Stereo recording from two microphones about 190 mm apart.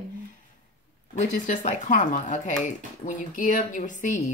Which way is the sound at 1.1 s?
40° left (ahead or behind).